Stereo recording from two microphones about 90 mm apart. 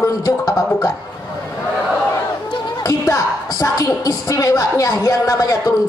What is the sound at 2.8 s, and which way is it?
Speech, 40° left (ahead or behind).